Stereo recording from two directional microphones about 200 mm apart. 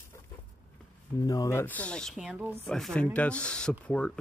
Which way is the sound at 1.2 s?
15° left (ahead or behind).